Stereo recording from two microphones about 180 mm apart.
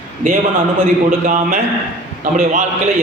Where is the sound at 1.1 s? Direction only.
50° right (ahead or behind).